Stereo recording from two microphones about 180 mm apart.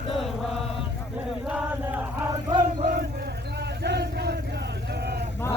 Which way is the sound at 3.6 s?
65° right (ahead or behind).